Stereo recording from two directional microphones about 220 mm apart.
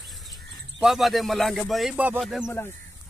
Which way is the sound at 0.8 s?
Centre (ahead or behind).